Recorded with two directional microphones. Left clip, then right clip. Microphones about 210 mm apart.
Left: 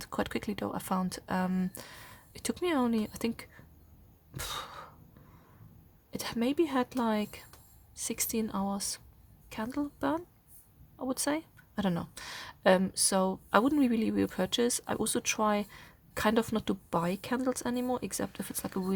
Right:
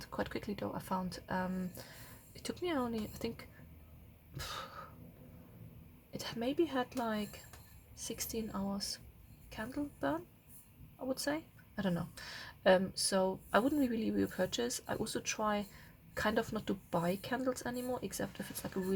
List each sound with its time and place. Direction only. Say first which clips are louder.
0.0 s speech: left 6 dB; 40° left (ahead or behind)
4.4 s a sound: left 5 dB; 40° left (ahead or behind)
6.1 s speech: left 6 dB; 40° left (ahead or behind)